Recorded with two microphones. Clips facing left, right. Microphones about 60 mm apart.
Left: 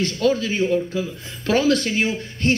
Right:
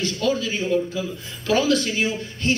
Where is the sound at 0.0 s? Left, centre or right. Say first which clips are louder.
Left 3 dB; left.